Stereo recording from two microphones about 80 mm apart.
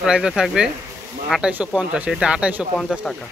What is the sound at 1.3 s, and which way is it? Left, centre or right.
Speech, centre.